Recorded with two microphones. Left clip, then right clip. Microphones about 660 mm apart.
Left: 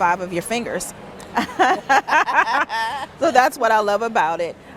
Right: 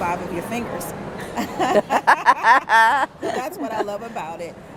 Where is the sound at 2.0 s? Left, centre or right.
Right.